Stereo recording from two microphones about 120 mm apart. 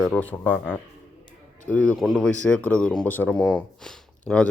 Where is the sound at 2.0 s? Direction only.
Centre (ahead or behind).